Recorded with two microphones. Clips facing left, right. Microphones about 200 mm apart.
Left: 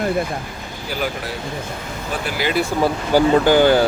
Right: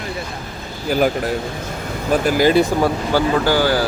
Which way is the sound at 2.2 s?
45° right (ahead or behind).